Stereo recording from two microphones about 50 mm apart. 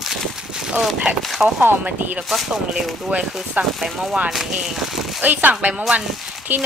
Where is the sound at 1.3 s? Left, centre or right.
Centre.